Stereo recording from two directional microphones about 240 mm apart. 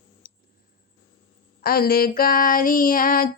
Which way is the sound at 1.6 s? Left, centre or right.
Left.